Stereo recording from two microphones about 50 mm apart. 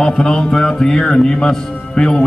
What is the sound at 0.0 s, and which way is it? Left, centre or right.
Speech, centre.